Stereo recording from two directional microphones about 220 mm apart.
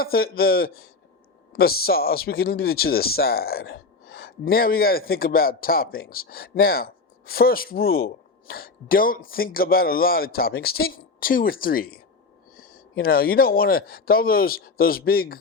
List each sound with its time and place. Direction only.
0.0 s speech: 45° left (ahead or behind)